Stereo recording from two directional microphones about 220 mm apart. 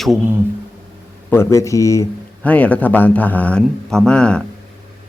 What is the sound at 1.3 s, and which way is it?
Speech, 10° left (ahead or behind).